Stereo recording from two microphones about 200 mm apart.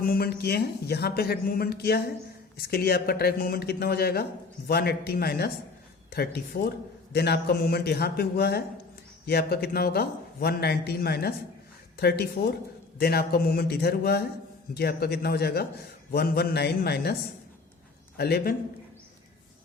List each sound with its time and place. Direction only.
0.0 s a man's voice: 50° left (ahead or behind)
18.2 s a man's voice: 50° left (ahead or behind)